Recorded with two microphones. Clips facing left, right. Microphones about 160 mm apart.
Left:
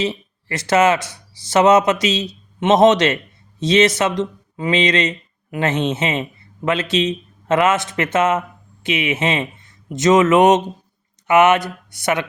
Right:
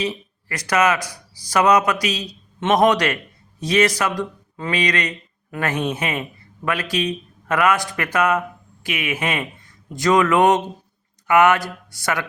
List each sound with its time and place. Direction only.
0.0 s speech: 25° left (ahead or behind)